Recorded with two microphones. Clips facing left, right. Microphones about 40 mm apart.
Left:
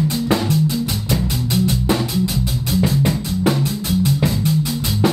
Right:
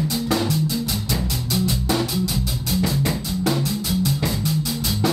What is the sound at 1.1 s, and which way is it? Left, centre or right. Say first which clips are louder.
Music: left 6 dB; left.